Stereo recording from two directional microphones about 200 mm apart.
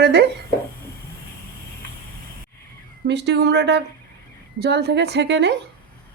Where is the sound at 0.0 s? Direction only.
55° right (ahead or behind).